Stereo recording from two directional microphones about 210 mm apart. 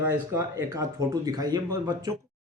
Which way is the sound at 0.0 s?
10° right (ahead or behind).